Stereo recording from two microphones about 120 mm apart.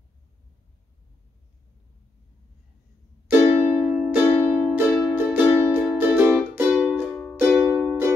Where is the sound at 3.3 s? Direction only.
15° right (ahead or behind).